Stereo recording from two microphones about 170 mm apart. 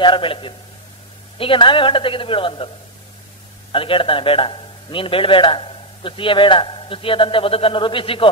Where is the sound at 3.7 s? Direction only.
30° left (ahead or behind).